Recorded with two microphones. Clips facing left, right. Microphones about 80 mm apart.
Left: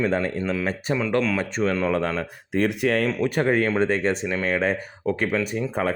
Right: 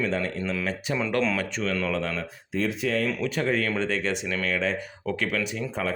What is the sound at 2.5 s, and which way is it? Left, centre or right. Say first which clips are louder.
Speech: left 5 dB; left.